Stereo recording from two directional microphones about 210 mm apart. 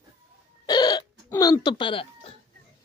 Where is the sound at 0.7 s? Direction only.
20° left (ahead or behind).